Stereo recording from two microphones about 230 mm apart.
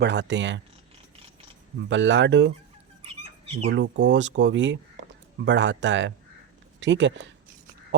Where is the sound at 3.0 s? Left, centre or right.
Right.